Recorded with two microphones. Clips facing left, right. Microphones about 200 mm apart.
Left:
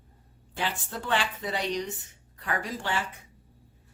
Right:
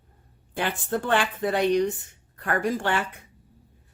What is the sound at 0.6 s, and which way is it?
A woman's voice, 55° right (ahead or behind).